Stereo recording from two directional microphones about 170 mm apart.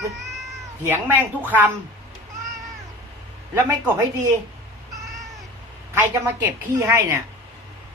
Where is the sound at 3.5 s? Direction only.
15° right (ahead or behind).